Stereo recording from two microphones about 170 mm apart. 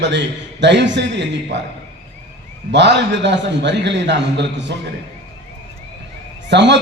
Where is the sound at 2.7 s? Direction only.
90° right.